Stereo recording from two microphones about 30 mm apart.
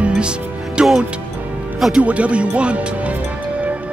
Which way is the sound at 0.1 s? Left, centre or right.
Right.